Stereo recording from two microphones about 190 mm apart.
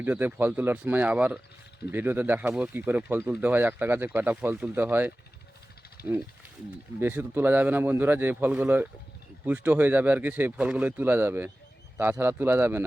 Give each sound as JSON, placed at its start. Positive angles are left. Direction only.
{"t": 0.0, "sound": "speech", "side_deg": -10}
{"t": 6.0, "sound": "wild animals", "side_deg": 55}
{"t": 7.0, "sound": "speech", "side_deg": -10}